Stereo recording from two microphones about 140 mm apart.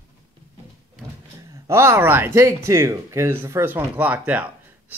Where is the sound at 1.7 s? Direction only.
20° right (ahead or behind).